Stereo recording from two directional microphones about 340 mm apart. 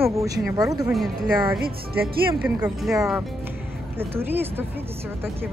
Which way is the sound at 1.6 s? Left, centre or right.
Right.